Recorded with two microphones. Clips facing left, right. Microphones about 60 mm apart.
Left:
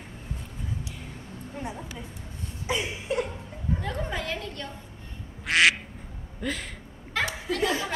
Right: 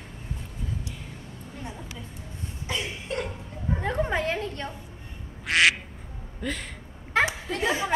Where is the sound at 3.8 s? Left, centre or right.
Right.